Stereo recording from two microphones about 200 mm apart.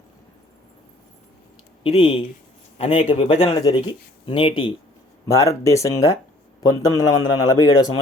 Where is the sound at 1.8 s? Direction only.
25° left (ahead or behind).